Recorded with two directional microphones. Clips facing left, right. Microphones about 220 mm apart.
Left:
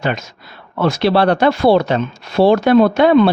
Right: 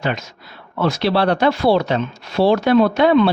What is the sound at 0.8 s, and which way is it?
Speech, 50° left (ahead or behind).